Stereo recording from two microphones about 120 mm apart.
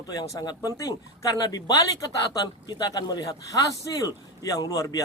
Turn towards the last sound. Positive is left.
turn(degrees=30)  # may be behind; listen again after turning